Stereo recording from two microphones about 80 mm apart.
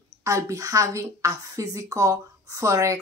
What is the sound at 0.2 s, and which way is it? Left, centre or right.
A woman's voice, right.